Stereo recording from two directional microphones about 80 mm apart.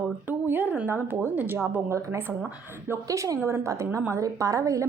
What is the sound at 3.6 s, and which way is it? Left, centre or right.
A woman's voice, right.